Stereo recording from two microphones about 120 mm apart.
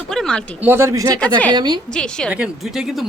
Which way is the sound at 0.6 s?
20° right (ahead or behind).